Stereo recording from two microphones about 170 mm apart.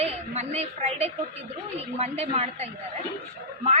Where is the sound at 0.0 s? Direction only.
40° right (ahead or behind).